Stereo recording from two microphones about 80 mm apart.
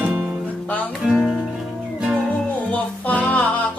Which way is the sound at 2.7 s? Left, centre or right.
Centre.